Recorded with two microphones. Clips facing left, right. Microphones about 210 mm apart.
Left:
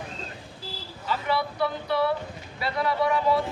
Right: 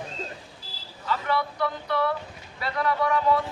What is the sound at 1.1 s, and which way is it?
Vehicle, 5° left (ahead or behind).